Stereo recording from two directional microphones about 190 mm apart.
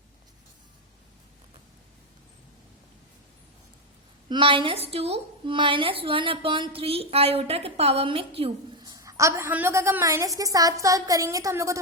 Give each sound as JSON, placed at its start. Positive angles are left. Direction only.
{"t": 4.3, "sound": "a woman's voice", "side_deg": -25}